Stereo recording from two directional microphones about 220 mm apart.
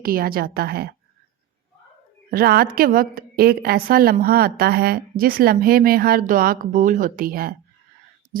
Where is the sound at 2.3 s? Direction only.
45° right (ahead or behind).